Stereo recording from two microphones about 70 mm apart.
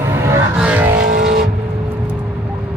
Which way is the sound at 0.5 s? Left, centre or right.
Centre.